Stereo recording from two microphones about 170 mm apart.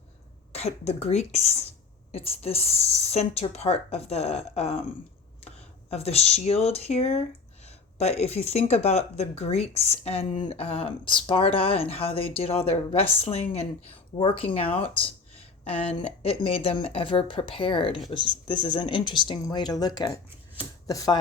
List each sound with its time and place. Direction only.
0.5 s a woman's voice: 40° left (ahead or behind); by 21.2 s 20° left (ahead or behind)